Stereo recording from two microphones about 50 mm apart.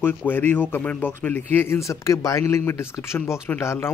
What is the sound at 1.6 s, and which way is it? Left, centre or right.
Speech, left.